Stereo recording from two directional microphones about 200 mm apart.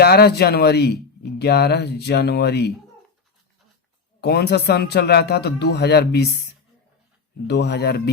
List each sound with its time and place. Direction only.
0.0 s speech: 50° left (ahead or behind)
4.2 s speech: 55° left (ahead or behind)